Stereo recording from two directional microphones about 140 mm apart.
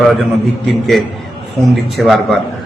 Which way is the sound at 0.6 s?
Centre (ahead or behind).